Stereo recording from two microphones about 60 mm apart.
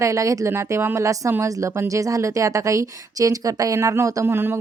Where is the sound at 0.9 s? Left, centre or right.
Right.